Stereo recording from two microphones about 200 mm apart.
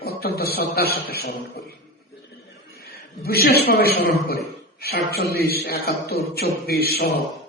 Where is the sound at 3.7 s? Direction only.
50° left (ahead or behind).